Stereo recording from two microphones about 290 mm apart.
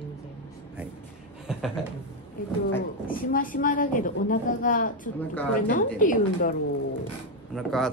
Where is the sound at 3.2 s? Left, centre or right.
Left.